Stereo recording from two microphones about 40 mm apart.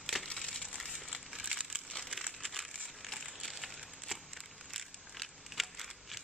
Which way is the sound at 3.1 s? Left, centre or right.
Centre.